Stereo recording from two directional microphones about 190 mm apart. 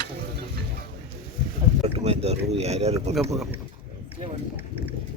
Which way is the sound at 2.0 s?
35° right (ahead or behind).